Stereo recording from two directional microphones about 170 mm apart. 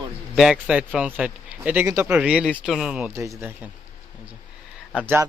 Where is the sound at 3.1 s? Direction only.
15° right (ahead or behind).